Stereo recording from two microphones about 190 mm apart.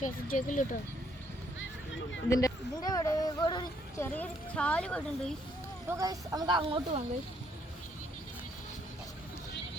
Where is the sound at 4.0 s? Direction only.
10° left (ahead or behind).